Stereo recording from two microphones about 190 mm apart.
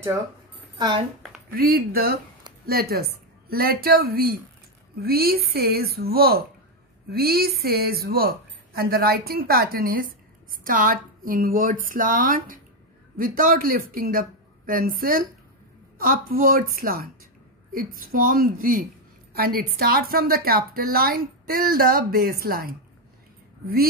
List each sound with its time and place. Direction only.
0.7 s speech: 20° right (ahead or behind)
1.5 s a woman's voice: 50° right (ahead or behind)